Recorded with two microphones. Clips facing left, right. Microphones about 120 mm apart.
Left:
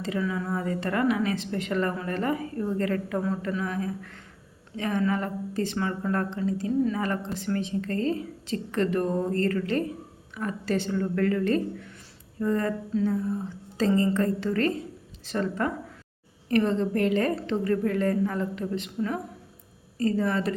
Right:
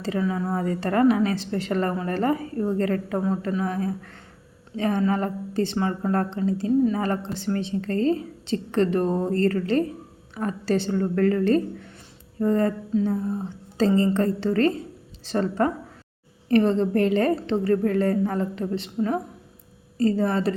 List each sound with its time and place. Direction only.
0.0 s a woman's voice: 35° right (ahead or behind)